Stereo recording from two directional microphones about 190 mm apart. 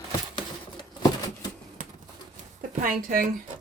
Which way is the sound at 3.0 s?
50° right (ahead or behind).